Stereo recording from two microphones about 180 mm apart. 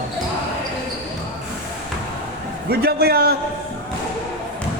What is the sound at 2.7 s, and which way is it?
Speech, 60° right (ahead or behind).